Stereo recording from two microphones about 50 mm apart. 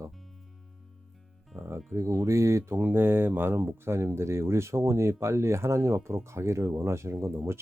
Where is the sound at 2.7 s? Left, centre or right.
Right.